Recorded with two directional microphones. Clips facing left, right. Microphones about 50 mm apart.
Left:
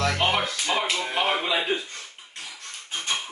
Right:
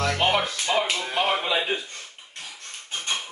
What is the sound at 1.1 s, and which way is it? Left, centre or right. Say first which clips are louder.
Speech: right 1 dB; centre.